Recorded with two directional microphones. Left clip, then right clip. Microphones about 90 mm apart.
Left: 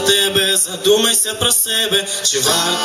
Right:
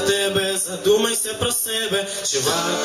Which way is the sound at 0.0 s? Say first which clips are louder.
Left 5 dB; 25° left (ahead or behind).